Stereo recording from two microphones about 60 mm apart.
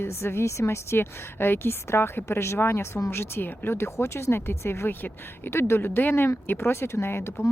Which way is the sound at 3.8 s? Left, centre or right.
Left.